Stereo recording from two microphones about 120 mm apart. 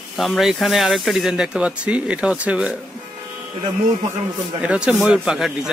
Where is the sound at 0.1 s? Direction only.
Centre (ahead or behind).